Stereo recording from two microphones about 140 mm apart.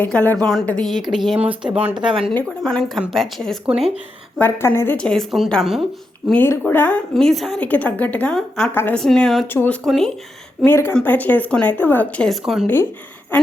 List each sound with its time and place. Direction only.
0.0 s a woman's voice: 10° left (ahead or behind)
1.6 s speech: 45° right (ahead or behind)
2.3 s speech: 5° left (ahead or behind)
4.4 s a woman's voice: 15° left (ahead or behind)
6.3 s a woman's voice: 15° left (ahead or behind)
8.7 s a woman's voice: 15° left (ahead or behind)
9.0 s speech: 5° left (ahead or behind)
9.5 s a woman's voice: 10° left (ahead or behind)
10.6 s a woman's voice: 15° left (ahead or behind); by 12.6 s centre (ahead or behind)
12.6 s a woman's voice: 15° left (ahead or behind)